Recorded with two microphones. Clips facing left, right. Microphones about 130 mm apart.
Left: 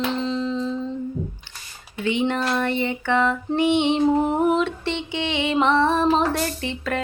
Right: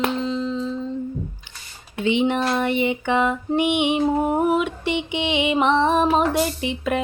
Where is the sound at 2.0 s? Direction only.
20° right (ahead or behind).